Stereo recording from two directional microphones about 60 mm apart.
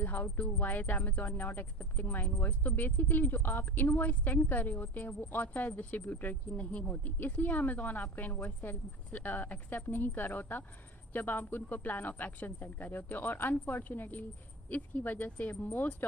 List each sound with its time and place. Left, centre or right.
0.0 s speech: left